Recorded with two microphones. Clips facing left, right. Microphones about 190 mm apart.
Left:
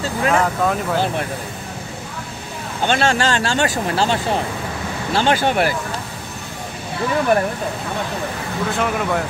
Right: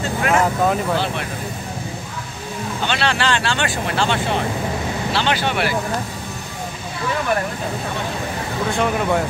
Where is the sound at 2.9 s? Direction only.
45° left (ahead or behind).